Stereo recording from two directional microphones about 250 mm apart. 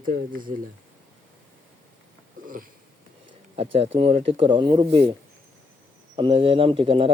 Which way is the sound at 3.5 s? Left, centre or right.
Right.